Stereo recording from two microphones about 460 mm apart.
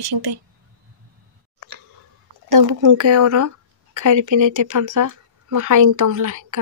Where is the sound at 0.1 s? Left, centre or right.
Right.